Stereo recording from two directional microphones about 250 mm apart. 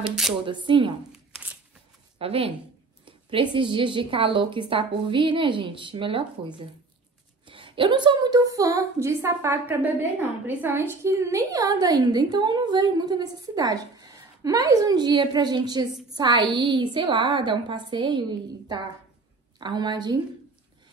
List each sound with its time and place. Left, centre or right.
0.0 s speech: centre
0.5 s a woman's voice: centre
1.1 s shuffling cards: centre
2.1 s a woman's voice: right
19.6 s a woman's voice: centre